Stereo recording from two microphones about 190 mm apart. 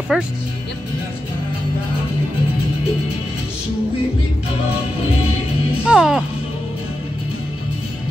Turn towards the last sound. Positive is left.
turn(degrees=-5)  # may be behind; listen again after turning